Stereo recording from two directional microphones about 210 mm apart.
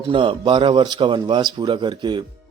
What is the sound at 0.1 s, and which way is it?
Speech, 25° right (ahead or behind).